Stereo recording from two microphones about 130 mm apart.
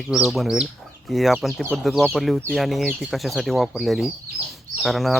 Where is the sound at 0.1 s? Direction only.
Centre (ahead or behind).